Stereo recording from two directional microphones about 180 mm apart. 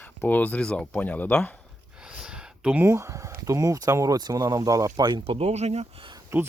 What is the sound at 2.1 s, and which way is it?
Speech, 5° right (ahead or behind).